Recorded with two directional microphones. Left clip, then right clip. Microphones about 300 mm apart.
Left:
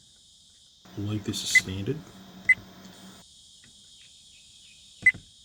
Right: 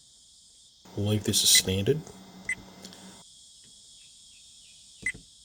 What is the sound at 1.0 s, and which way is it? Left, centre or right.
Speech, right.